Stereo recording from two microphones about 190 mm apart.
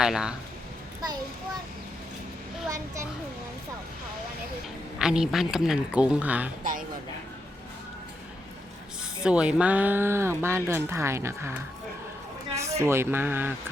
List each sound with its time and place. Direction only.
0.0 s speech: 5° right (ahead or behind)
2.6 s speech: 15° right (ahead or behind)
4.9 s speech: 5° right (ahead or behind)
9.2 s speech: 5° right (ahead or behind)
12.8 s speech: 15° right (ahead or behind)